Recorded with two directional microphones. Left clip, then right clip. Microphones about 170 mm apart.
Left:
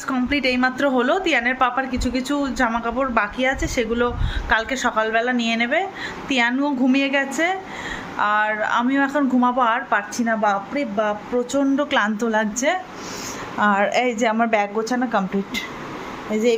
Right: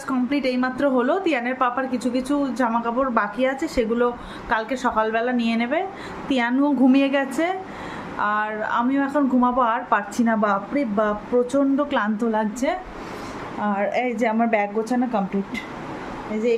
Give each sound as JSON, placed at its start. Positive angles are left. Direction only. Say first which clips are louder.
{"t": 0.1, "sound": "a woman's voice", "louder": "left 2 dB", "side_deg": -10}
{"t": 8.2, "sound": "a woman's voice", "louder": "left 4 dB", "side_deg": -5}
{"t": 10.2, "sound": "a woman's voice", "louder": "left 1 dB", "side_deg": -20}
{"t": 11.5, "sound": "a woman's voice", "louder": "left 1 dB", "side_deg": -5}
{"t": 13.6, "sound": "a woman's voice", "louder": "left 5 dB", "side_deg": 15}
{"t": 16.3, "sound": "speech", "louder": "left 3 dB", "side_deg": 40}